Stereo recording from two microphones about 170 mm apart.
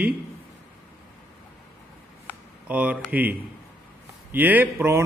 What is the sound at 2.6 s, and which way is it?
A man's voice, 10° right (ahead or behind).